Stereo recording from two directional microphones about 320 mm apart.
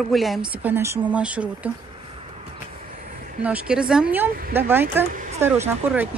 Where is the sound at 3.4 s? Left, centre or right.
Centre.